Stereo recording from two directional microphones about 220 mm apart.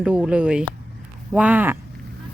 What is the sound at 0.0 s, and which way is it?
Speech, 5° right (ahead or behind).